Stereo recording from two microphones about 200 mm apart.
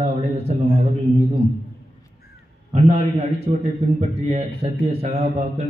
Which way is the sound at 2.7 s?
30° right (ahead or behind).